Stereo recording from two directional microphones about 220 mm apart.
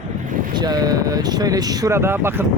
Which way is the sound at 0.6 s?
15° right (ahead or behind).